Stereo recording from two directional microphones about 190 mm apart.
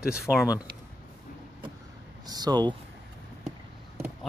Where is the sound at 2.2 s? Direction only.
20° right (ahead or behind).